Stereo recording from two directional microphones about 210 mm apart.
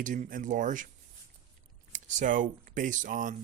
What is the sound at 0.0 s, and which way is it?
Speech, 40° right (ahead or behind).